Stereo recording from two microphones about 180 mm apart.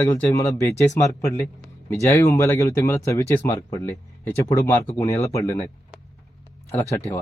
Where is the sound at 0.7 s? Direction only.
35° left (ahead or behind).